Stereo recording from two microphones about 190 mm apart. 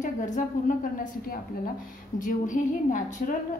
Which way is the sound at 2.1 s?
45° left (ahead or behind).